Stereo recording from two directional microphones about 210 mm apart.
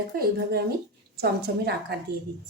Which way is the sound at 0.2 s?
50° right (ahead or behind).